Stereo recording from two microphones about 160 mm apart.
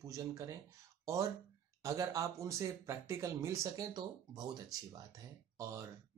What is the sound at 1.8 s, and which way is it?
Speech, 20° right (ahead or behind).